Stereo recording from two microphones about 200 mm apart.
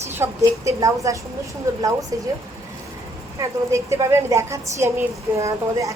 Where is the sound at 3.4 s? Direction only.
15° right (ahead or behind).